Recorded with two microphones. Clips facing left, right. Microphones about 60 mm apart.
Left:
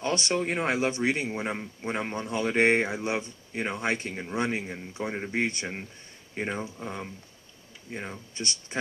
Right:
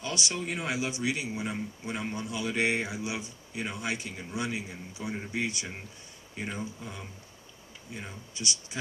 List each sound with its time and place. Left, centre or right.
0.0 s speech: left